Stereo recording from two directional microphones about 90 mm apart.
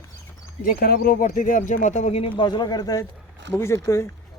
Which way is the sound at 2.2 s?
65° left (ahead or behind).